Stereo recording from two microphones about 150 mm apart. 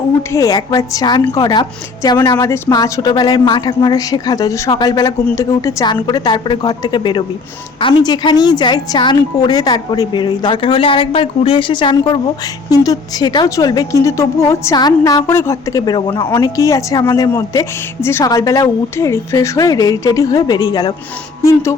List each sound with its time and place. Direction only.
0.2 s a woman's voice: 20° left (ahead or behind)